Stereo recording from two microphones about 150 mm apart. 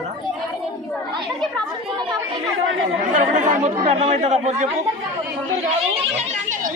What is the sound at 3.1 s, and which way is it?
Speech, 55° right (ahead or behind).